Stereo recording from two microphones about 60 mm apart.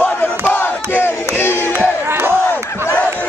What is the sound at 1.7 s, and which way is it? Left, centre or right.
Crowd, right.